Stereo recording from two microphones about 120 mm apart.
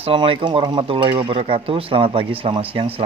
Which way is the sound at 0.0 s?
50° right (ahead or behind).